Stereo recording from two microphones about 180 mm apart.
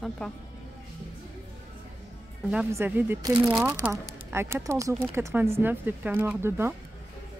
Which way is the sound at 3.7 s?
15° right (ahead or behind).